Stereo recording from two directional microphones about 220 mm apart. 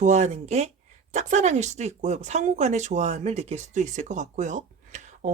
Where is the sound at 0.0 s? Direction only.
30° right (ahead or behind).